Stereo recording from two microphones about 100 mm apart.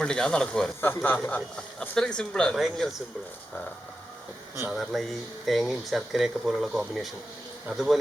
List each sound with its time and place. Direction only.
0.0 s speech: 10° left (ahead or behind)
0.8 s speech: 20° left (ahead or behind)
1.8 s speech: 10° left (ahead or behind)
4.7 s speech: centre (ahead or behind)